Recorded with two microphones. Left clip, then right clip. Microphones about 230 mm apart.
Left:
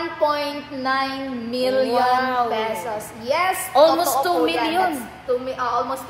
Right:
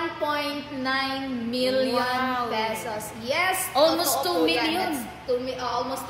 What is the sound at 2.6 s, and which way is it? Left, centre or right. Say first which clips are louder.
Speech: left 3 dB; left.